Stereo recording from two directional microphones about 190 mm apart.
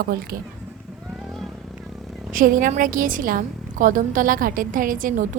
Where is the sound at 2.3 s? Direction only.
45° right (ahead or behind).